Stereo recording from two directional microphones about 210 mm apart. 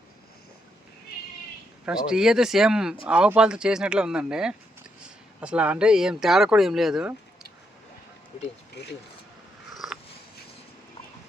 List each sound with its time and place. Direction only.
1.8 s speech: 5° right (ahead or behind)
8.8 s speech: 55° left (ahead or behind)
9.7 s cat: centre (ahead or behind)